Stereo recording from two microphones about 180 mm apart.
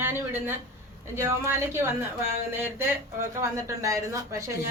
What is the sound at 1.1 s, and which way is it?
Speech, 15° right (ahead or behind).